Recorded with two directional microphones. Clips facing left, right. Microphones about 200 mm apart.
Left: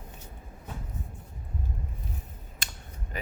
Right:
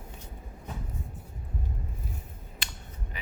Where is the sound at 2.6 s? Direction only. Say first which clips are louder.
Even; 45° left (ahead or behind).